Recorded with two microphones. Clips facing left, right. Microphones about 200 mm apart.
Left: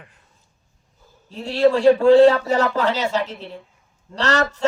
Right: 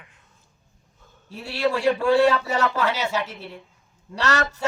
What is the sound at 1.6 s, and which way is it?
Speech, 30° left (ahead or behind).